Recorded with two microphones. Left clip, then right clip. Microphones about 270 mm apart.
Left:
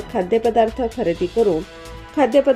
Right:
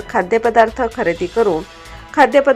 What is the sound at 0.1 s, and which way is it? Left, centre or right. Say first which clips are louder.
Speech: right 3 dB; centre.